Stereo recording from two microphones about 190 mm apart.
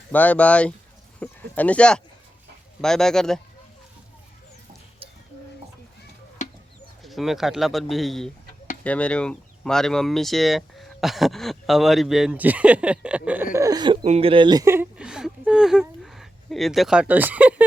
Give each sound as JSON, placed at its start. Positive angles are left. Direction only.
{"t": 0.1, "sound": "speech", "side_deg": 10}
{"t": 6.4, "sound": "bird", "side_deg": 35}
{"t": 7.0, "sound": "speech", "side_deg": 0}